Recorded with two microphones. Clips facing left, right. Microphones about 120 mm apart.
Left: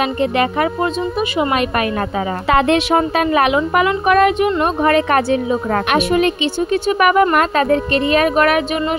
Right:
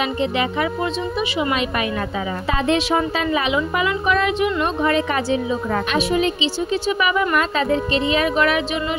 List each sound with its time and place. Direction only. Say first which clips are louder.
0.0 s speech: left 4 dB; 50° left (ahead or behind)
2.4 s a woman's voice: left 6 dB; 65° left (ahead or behind)